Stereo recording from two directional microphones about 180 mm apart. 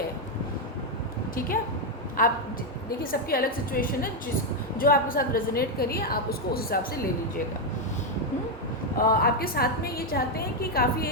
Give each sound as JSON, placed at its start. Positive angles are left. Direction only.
{"t": 2.2, "sound": "a woman's voice", "side_deg": 50}
{"t": 9.0, "sound": "a woman's voice", "side_deg": 55}